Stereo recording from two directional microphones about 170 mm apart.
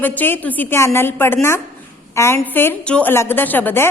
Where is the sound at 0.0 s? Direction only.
10° left (ahead or behind).